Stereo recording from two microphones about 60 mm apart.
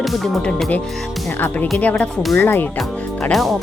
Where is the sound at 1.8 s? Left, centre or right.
Left.